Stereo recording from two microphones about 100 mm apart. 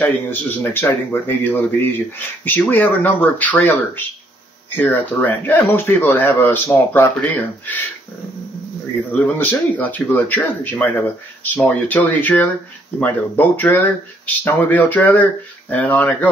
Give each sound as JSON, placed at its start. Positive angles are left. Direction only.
{"t": 0.0, "sound": "speech", "side_deg": 20}
{"t": 9.1, "sound": "speech", "side_deg": 15}